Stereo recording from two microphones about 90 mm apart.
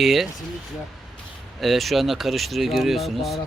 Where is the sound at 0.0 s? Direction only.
Centre (ahead or behind).